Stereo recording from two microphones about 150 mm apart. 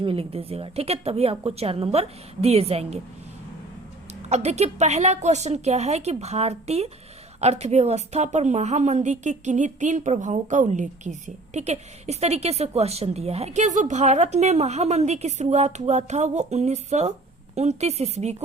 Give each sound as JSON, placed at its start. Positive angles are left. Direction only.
{"t": 0.0, "sound": "a woman's voice", "side_deg": -40}
{"t": 4.3, "sound": "a woman's voice", "side_deg": -45}